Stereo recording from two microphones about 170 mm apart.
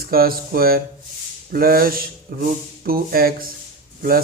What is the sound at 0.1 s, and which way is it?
Speech, 60° right (ahead or behind).